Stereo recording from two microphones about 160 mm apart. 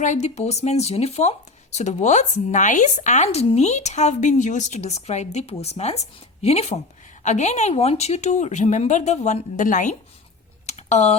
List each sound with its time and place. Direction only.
0.0 s speech: 45° left (ahead or behind)
10.7 s typing: 45° left (ahead or behind)